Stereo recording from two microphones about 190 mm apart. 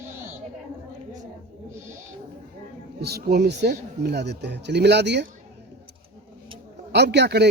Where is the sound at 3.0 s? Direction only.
55° right (ahead or behind).